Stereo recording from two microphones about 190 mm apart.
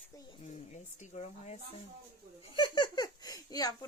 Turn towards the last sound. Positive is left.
turn(degrees=20)  # may be behind; listen again after turning